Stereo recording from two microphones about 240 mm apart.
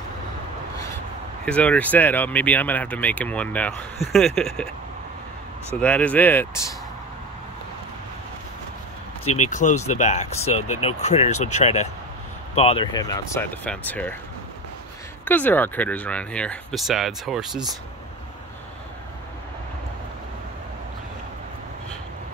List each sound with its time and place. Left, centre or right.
1.4 s speech: centre
5.8 s speech: centre
9.4 s speech: left; by 14.1 s centre
15.2 s speech: centre